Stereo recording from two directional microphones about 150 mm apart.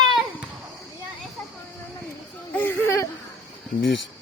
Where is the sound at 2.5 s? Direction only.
15° left (ahead or behind).